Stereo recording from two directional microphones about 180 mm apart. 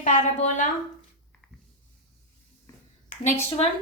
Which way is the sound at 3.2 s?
40° left (ahead or behind).